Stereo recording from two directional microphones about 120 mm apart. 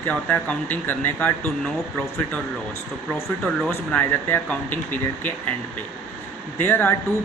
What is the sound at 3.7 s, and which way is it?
Speech, 15° left (ahead or behind).